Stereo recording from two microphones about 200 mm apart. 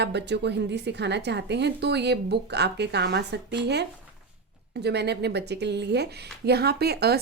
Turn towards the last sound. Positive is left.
turn(degrees=-55)  # may be behind; listen again after turning